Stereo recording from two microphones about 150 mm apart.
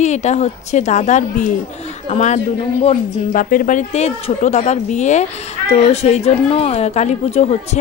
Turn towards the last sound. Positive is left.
turn(degrees=45)  # may be behind; listen again after turning